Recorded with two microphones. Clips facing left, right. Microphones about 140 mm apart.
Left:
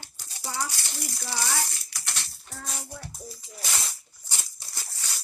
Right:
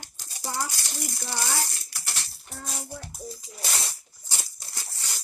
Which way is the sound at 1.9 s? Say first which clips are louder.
Even; centre (ahead or behind).